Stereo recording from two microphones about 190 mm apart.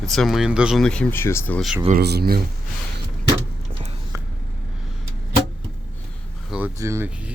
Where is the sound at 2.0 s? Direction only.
55° right (ahead or behind).